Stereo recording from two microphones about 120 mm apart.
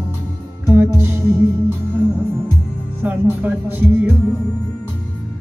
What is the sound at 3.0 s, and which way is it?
Music, 15° right (ahead or behind).